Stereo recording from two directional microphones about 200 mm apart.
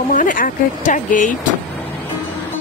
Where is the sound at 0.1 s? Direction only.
40° left (ahead or behind).